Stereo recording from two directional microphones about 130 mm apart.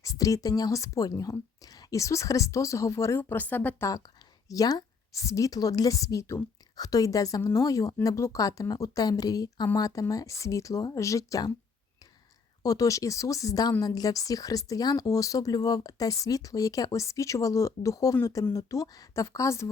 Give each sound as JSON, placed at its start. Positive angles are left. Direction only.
{"t": 0.0, "sound": "a woman's voice", "side_deg": 25}
{"t": 4.4, "sound": "a woman's voice", "side_deg": 25}
{"t": 12.6, "sound": "a woman's voice", "side_deg": 25}